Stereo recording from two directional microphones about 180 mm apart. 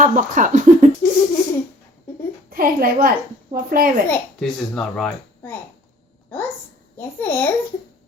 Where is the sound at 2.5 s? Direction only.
55° right (ahead or behind).